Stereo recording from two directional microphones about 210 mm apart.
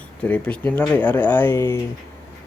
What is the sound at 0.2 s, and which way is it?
Speech, 5° left (ahead or behind).